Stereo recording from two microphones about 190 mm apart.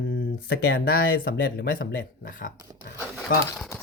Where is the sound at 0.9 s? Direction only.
55° left (ahead or behind).